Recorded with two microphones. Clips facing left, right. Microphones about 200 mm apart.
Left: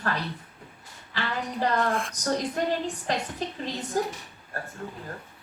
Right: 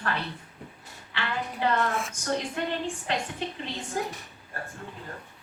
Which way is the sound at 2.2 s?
40° left (ahead or behind).